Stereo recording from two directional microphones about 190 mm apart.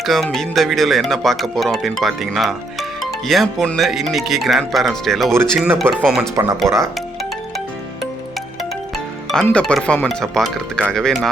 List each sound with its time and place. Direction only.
0.0 s speech: centre (ahead or behind)
5.5 s speech: 10° right (ahead or behind)
6.3 s speech: 15° right (ahead or behind)
9.3 s speech: 5° left (ahead or behind)